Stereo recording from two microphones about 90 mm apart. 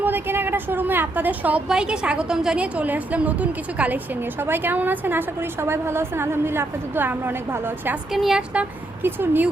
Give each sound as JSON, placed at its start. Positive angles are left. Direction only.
{"t": 0.0, "sound": "a woman's voice", "side_deg": -25}
{"t": 8.1, "sound": "speech", "side_deg": -5}
{"t": 9.0, "sound": "a woman's voice", "side_deg": -25}